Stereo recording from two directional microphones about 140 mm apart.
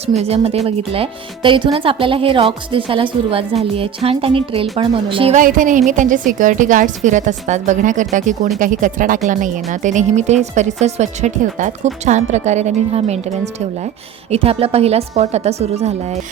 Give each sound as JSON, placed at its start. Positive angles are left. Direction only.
{"t": 0.2, "sound": "a woman's voice", "side_deg": -45}
{"t": 5.3, "sound": "a woman's voice", "side_deg": -70}